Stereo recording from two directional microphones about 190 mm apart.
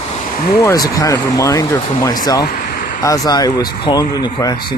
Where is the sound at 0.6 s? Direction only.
20° left (ahead or behind).